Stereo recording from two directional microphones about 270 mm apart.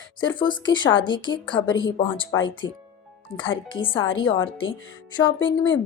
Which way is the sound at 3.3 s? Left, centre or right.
Centre.